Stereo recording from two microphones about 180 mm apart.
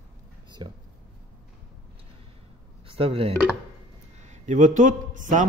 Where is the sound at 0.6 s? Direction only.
25° right (ahead or behind).